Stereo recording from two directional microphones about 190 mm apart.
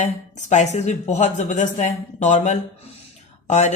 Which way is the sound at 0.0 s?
40° left (ahead or behind).